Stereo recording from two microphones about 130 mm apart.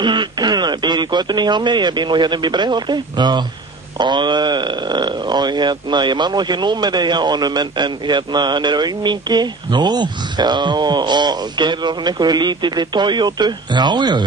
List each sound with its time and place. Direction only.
0.0 s speech: 35° right (ahead or behind)